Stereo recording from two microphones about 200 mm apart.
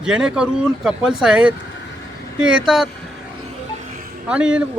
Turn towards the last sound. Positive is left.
turn(degrees=-5)  # may be behind; listen again after turning